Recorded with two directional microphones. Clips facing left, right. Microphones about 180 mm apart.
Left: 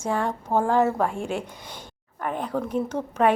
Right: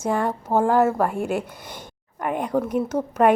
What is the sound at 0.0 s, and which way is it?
Speech, 10° right (ahead or behind).